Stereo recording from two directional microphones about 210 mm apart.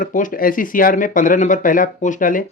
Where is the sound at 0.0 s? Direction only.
40° left (ahead or behind).